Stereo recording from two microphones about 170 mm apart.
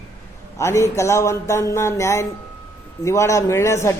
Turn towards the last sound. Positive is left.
turn(degrees=15)  # may be behind; listen again after turning